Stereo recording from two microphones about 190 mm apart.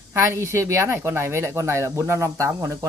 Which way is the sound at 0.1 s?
15° right (ahead or behind).